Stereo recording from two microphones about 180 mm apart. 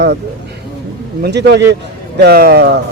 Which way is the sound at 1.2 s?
70° right (ahead or behind).